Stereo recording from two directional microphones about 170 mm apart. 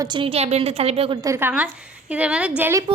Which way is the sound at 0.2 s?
35° right (ahead or behind).